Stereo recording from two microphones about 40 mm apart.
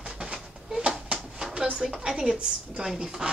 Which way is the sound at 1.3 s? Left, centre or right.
Right.